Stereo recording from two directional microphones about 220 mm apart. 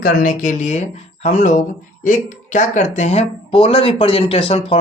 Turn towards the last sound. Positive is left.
turn(degrees=25)  # may be behind; listen again after turning